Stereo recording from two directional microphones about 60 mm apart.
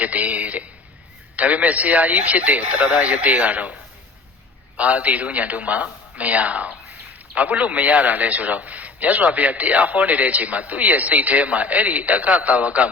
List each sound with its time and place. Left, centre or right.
0.0 s a sound: right
1.4 s a man's voice: right
4.8 s a man's voice: right